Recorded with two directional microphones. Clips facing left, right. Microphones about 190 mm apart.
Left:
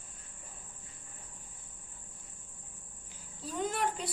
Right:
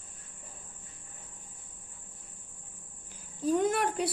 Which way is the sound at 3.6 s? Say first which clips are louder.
Right 5 dB; 60° right (ahead or behind).